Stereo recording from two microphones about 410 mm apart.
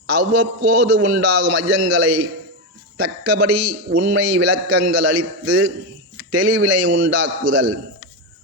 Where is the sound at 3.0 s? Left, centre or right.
Right.